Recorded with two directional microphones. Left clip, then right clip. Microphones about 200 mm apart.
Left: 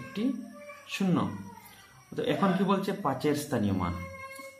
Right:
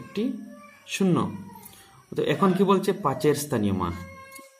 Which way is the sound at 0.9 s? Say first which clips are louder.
Right 5 dB; 40° right (ahead or behind).